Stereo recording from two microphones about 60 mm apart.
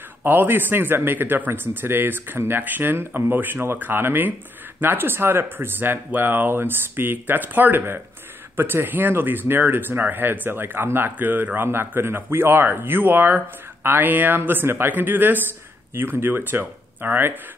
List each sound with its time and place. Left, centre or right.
0.2 s speech: right